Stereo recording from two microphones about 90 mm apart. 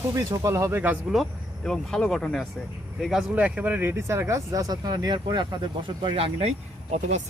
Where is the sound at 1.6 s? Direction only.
5° left (ahead or behind).